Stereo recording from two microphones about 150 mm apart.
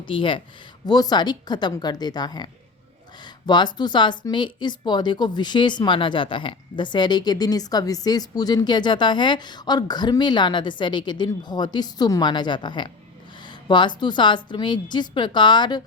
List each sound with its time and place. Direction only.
0.0 s a woman's voice: 35° left (ahead or behind)